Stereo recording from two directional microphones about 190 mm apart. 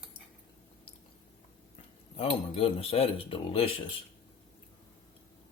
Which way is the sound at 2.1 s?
30° left (ahead or behind).